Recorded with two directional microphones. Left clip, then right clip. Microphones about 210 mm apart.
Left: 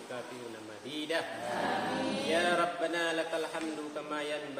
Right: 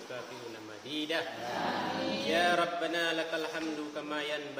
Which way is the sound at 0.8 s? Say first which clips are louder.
Even; 10° right (ahead or behind).